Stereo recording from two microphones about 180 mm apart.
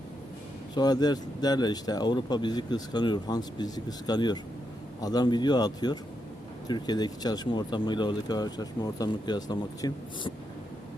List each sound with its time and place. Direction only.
0.8 s speech: 20° left (ahead or behind)